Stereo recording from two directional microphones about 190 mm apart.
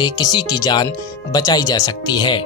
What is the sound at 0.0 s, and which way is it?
Speech, 20° left (ahead or behind).